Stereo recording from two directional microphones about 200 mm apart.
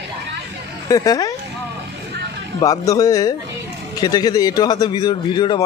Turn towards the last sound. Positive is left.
turn(degrees=20)  # may be behind; listen again after turning